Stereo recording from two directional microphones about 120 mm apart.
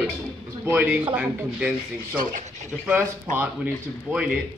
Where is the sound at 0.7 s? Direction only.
15° right (ahead or behind).